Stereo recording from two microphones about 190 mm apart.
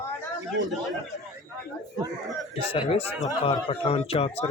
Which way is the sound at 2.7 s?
25° left (ahead or behind).